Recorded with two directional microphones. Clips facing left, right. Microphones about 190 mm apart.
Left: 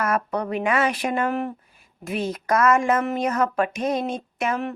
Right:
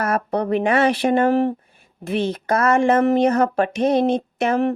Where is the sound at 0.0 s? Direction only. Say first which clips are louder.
Right 3 dB; 35° right (ahead or behind).